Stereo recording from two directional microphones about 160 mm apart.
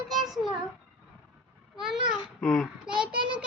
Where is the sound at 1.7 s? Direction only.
5° right (ahead or behind).